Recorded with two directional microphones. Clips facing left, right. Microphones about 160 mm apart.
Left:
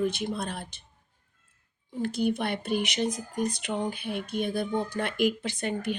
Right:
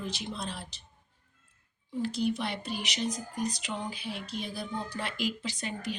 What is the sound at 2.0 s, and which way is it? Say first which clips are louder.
Speech: left 4 dB; 55° left (ahead or behind).